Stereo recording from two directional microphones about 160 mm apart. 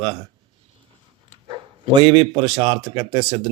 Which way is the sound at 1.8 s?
35° right (ahead or behind).